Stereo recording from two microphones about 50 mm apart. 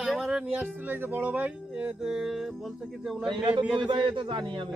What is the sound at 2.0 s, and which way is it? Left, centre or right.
Speech, centre.